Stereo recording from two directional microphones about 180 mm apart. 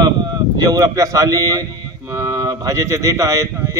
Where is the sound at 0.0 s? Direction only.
25° right (ahead or behind).